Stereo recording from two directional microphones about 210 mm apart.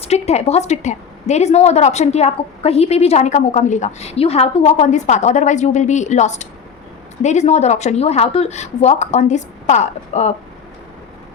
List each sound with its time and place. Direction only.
0.0 s a woman's voice: 30° left (ahead or behind)